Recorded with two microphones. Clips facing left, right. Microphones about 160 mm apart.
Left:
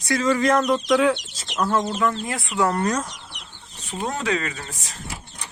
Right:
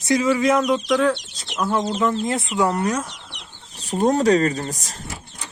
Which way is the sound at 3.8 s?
40° right (ahead or behind).